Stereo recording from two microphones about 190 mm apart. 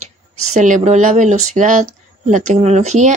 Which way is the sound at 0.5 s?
40° right (ahead or behind).